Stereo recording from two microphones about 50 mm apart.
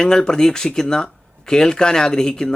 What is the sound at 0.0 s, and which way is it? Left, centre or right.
Speech, centre.